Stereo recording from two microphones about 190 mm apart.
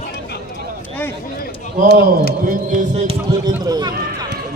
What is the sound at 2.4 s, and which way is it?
Run, 45° right (ahead or behind).